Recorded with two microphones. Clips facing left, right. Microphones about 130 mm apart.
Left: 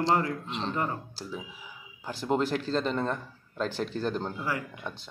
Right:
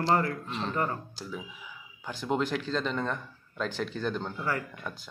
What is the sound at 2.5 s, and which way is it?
Speech, 40° left (ahead or behind).